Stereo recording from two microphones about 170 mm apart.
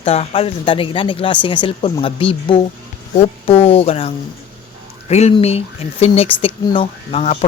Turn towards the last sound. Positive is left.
turn(degrees=40)  # may be behind; listen again after turning